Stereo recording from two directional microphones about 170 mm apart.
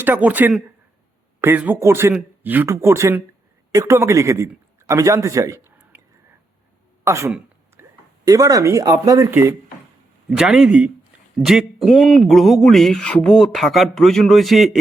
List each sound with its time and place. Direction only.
0.0 s a man's voice: 10° right (ahead or behind)
7.0 s speech: 15° right (ahead or behind)
7.3 s a sound: 5° right (ahead or behind)
8.3 s speech: 20° right (ahead or behind)
10.2 s speech: 5° right (ahead or behind)